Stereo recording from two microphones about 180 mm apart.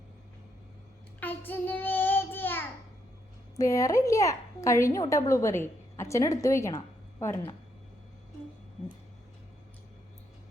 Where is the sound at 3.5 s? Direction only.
15° left (ahead or behind).